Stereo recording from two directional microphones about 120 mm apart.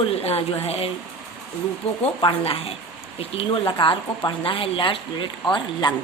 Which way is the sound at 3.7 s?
40° left (ahead or behind).